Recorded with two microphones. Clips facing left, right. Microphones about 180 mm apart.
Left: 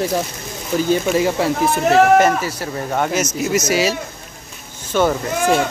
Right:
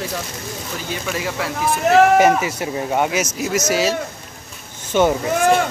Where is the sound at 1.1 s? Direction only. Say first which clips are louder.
Left 8 dB; 30° left (ahead or behind).